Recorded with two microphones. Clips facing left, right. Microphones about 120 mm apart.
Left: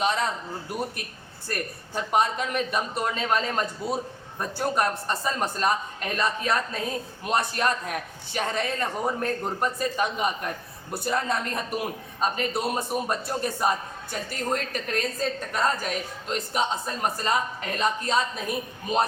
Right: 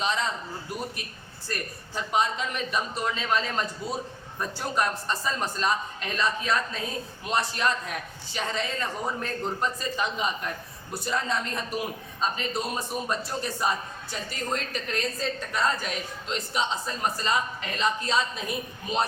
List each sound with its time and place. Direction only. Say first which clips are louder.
0.0 s a man's voice: left 3 dB; 55° left (ahead or behind)
1.5 s a man's voice: left 3 dB; 55° left (ahead or behind)